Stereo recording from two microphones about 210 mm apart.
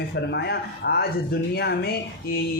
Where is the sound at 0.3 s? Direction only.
55° left (ahead or behind).